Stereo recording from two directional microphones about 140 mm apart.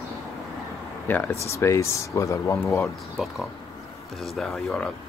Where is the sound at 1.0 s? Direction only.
15° left (ahead or behind).